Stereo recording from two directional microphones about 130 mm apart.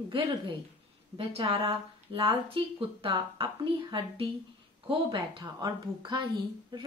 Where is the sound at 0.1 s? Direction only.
40° right (ahead or behind).